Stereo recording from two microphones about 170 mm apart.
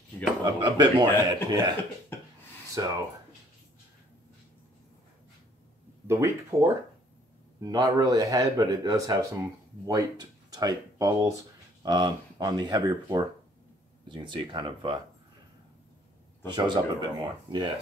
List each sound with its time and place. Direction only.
0.6 s speech: 25° right (ahead or behind)
2.8 s speech: 20° right (ahead or behind)
6.0 s speech: 15° right (ahead or behind)
16.4 s speech: 25° right (ahead or behind)